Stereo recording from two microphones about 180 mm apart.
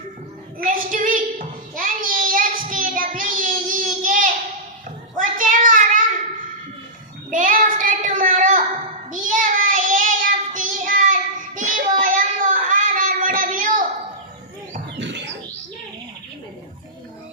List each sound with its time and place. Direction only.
0.7 s child singing: 45° right (ahead or behind)
7.3 s child singing: 45° right (ahead or behind)
14.9 s a sound: 75° right (ahead or behind)